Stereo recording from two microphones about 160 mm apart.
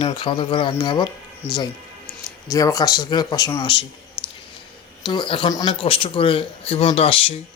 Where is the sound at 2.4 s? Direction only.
20° left (ahead or behind).